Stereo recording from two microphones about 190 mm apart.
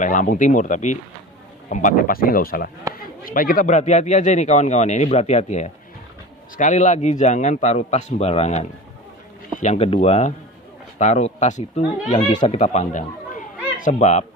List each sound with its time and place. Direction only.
0.0 s speech: 45° left (ahead or behind)